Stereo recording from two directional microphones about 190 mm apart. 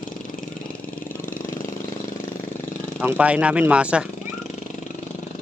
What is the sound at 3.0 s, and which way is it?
Speech, 5° right (ahead or behind).